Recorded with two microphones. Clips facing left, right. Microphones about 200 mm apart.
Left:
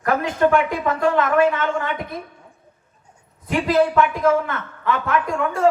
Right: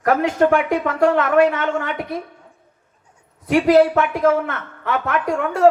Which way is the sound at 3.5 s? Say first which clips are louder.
Right 5 dB; 70° right (ahead or behind).